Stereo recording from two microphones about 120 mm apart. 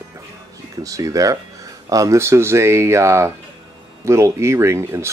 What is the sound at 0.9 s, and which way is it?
Speech, 30° right (ahead or behind).